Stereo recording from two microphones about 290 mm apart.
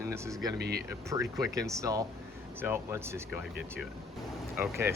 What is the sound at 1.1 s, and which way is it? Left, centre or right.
Speech, centre.